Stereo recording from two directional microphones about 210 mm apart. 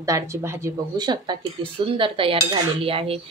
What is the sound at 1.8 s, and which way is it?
Cutlery, 25° right (ahead or behind).